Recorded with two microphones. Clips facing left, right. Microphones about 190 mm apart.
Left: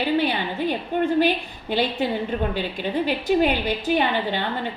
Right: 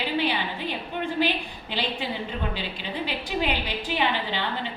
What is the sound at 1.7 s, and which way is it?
A woman's voice, 45° left (ahead or behind).